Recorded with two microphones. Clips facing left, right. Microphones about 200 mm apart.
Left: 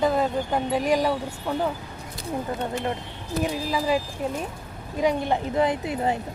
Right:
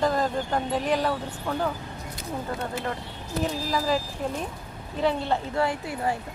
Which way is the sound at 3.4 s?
10° left (ahead or behind).